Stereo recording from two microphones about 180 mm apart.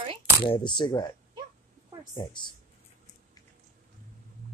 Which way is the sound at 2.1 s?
25° left (ahead or behind).